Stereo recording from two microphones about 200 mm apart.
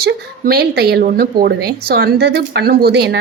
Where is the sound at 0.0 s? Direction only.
50° right (ahead or behind).